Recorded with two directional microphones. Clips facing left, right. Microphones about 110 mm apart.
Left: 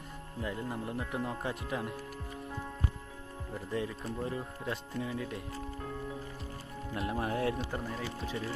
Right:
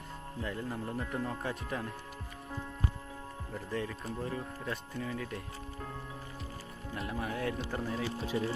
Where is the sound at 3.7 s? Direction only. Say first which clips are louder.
Left 1 dB; 20° left (ahead or behind).